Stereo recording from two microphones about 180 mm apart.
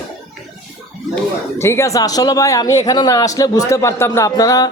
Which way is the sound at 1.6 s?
15° left (ahead or behind).